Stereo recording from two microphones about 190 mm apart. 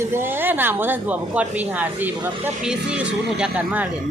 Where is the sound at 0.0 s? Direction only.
10° right (ahead or behind).